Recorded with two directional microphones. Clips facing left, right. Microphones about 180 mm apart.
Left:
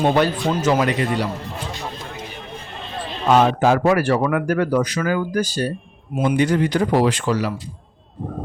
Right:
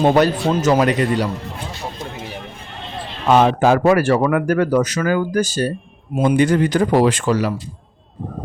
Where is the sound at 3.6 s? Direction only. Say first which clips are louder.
Right 2 dB; 55° right (ahead or behind).